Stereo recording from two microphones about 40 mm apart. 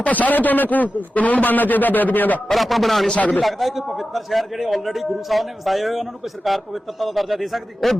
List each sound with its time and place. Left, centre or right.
0.0 s a man's voice: left
2.5 s a man's voice: centre
3.2 s a man's voice: left
3.4 s a man's voice: centre